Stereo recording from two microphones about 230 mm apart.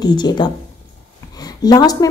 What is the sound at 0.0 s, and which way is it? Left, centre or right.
Speech, centre.